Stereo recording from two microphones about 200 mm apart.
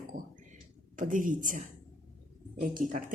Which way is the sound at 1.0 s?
40° right (ahead or behind).